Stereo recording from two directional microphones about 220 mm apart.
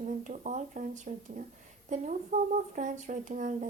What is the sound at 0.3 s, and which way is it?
Speech, 35° right (ahead or behind).